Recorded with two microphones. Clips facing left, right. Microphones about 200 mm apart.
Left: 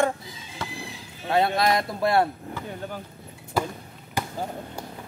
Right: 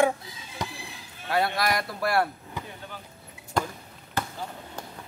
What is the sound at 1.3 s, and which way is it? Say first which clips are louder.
Speech: left 4 dB; 25° left (ahead or behind).